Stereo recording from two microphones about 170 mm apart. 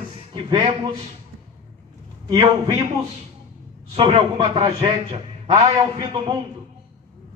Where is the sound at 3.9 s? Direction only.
30° right (ahead or behind).